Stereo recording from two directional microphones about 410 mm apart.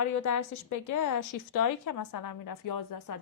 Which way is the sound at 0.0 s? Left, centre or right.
Left.